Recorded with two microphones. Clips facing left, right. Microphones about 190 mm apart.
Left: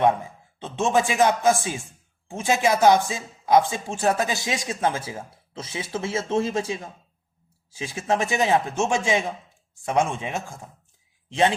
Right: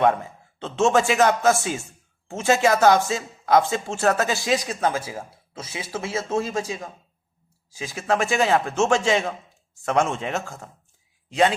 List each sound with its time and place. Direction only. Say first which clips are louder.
0.0 s a man's voice: right 1 dB; 15° left (ahead or behind)